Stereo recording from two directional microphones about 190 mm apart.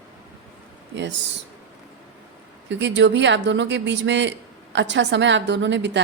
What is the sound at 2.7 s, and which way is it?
Speech, 70° right (ahead or behind).